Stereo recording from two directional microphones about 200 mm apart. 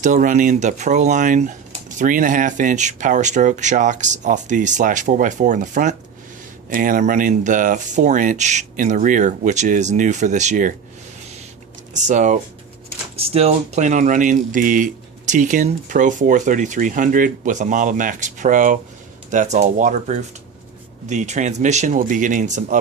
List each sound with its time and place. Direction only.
0.0 s speech: 40° right (ahead or behind)
11.9 s speech: 35° right (ahead or behind)